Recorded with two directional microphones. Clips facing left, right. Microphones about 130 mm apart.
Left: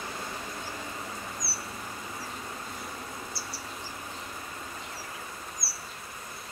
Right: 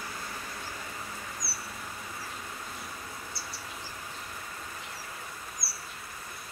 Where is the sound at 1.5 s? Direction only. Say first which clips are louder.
Left 3 dB; 25° left (ahead or behind).